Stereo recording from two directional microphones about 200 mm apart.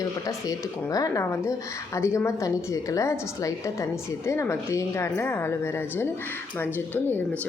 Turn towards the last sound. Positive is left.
turn(degrees=10)  # may be behind; listen again after turning